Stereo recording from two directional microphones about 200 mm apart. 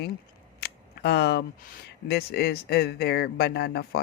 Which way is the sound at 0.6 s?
55° left (ahead or behind).